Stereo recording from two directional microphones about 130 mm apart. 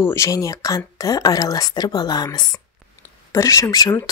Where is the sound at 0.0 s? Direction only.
20° left (ahead or behind).